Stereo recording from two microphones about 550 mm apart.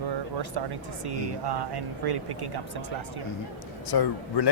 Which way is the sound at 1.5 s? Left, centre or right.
Right.